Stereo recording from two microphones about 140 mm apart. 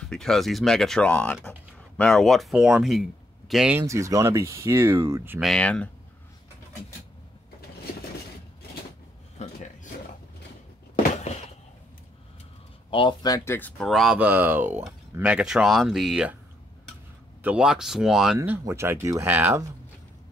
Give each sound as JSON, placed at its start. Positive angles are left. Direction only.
{"t": 0.1, "sound": "speech", "side_deg": 5}
{"t": 3.7, "sound": "speech", "side_deg": -20}
{"t": 5.4, "sound": "speech", "side_deg": 5}
{"t": 11.1, "sound": "a sound", "side_deg": 50}
{"t": 12.9, "sound": "speech", "side_deg": 30}
{"t": 13.5, "sound": "speech", "side_deg": 10}
{"t": 13.8, "sound": "speech", "side_deg": 0}
{"t": 17.4, "sound": "speech", "side_deg": -10}
{"t": 18.6, "sound": "speech", "side_deg": -20}